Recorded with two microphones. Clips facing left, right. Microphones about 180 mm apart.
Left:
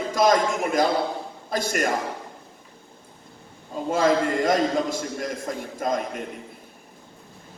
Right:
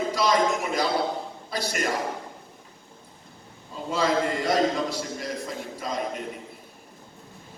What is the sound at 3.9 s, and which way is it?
A man's voice, 50° left (ahead or behind).